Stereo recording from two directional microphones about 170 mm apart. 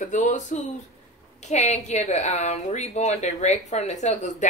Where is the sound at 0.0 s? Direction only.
45° left (ahead or behind).